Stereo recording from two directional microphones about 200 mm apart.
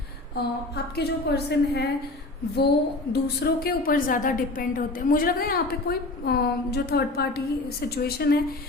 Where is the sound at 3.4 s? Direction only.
45° left (ahead or behind).